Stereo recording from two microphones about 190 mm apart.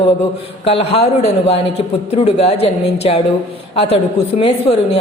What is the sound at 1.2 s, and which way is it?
Speech, 35° left (ahead or behind).